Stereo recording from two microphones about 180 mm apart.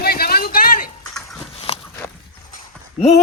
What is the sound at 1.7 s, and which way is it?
Walk, 35° left (ahead or behind).